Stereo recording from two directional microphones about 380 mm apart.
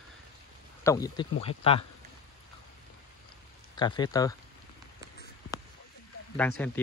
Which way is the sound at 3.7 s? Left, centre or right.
Centre.